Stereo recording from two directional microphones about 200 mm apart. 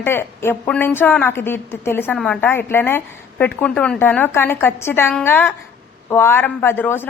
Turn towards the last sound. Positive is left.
turn(degrees=10)  # may be behind; listen again after turning